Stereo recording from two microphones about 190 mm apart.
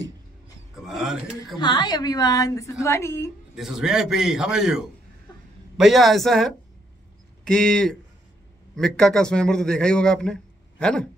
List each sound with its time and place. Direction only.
0.8 s a sound: centre (ahead or behind)
1.6 s a woman's voice: 25° left (ahead or behind)
3.5 s a man's voice: centre (ahead or behind)